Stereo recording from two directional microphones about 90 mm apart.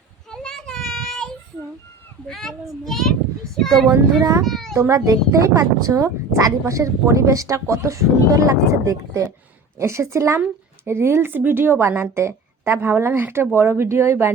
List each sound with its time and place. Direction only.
0.3 s children playing: 10° left (ahead or behind)
2.2 s a child's voice: 5° left (ahead or behind)
4.2 s speech: 40° right (ahead or behind)
4.4 s a child's voice: centre (ahead or behind)
4.7 s a woman's voice: 35° right (ahead or behind)